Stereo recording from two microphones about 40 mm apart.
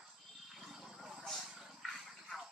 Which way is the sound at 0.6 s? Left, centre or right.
Centre.